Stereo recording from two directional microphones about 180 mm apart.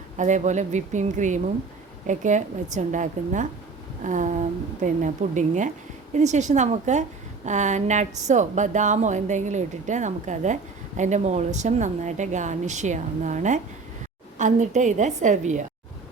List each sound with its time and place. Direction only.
0.2 s a woman's voice: 40° right (ahead or behind)